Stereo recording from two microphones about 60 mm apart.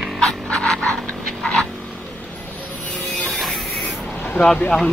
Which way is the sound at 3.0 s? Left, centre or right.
Centre.